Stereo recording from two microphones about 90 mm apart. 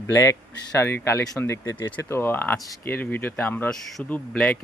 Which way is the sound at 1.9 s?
25° left (ahead or behind).